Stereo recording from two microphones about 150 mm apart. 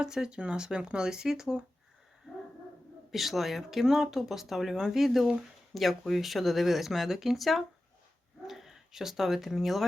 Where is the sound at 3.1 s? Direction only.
Centre (ahead or behind).